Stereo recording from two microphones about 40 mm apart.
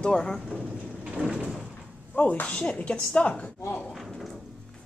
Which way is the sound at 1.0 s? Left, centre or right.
Right.